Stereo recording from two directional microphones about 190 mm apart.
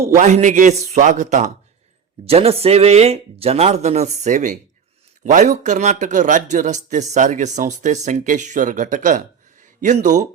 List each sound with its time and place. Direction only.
0.0 s a man's voice: 35° right (ahead or behind)